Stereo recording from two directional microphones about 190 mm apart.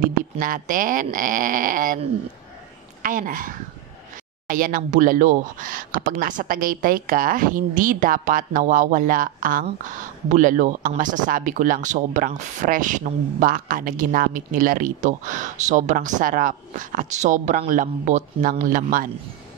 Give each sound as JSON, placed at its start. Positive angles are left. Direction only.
{"t": 0.0, "sound": "speech", "side_deg": -45}
{"t": 3.0, "sound": "a woman's voice", "side_deg": -45}